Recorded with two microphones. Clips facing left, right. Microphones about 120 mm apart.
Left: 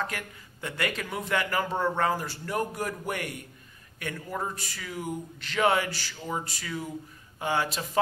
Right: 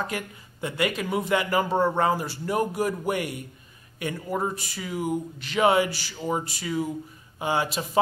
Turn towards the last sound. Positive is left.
turn(degrees=-15)  # may be behind; listen again after turning